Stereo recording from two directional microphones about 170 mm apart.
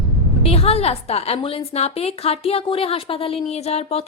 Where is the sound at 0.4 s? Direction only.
35° left (ahead or behind).